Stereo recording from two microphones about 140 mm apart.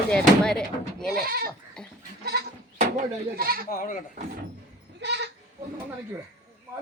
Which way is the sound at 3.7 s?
70° left (ahead or behind).